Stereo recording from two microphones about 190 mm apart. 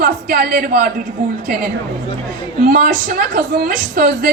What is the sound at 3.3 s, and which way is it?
Speech, 50° right (ahead or behind).